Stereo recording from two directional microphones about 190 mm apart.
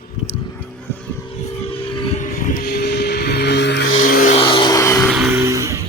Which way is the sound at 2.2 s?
45° left (ahead or behind).